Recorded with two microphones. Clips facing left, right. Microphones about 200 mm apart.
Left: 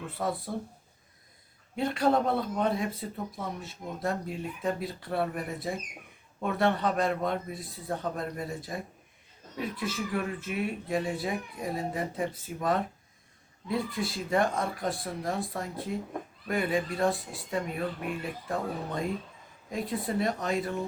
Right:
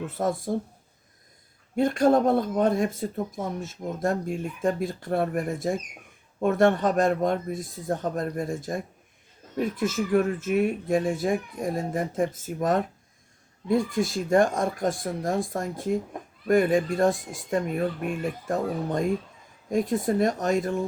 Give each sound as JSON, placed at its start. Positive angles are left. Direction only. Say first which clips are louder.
{"t": 0.2, "sound": "speech", "louder": "right 5 dB", "side_deg": -45}
{"t": 1.7, "sound": "speech", "louder": "right 6 dB", "side_deg": -45}